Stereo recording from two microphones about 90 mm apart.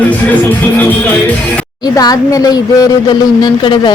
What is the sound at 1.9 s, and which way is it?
Speech, 40° left (ahead or behind).